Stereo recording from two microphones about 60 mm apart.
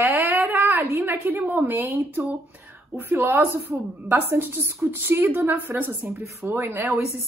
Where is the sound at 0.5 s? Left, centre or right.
Right.